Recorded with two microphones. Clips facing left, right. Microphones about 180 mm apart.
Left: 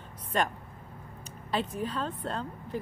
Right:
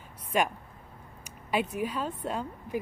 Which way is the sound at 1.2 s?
10° right (ahead or behind).